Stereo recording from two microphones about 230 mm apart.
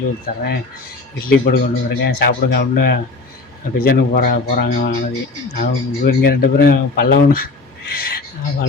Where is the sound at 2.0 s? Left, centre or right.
Left.